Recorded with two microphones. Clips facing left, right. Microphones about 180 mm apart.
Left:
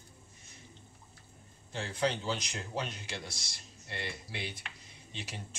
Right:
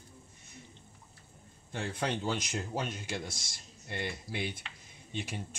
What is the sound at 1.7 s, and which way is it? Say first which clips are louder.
Speech: left 1 dB; 50° right (ahead or behind).